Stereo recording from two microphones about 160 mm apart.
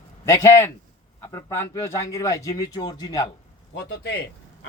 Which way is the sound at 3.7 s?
90° left.